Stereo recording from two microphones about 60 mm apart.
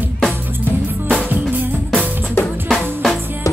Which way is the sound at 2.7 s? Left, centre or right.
Centre.